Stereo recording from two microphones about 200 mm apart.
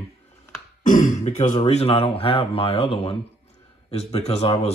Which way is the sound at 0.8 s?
40° left (ahead or behind).